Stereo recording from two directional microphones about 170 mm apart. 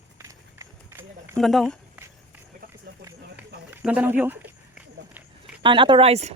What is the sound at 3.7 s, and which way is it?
Run, 10° right (ahead or behind).